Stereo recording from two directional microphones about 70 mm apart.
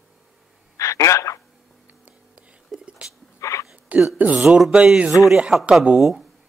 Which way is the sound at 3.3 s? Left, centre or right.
Left.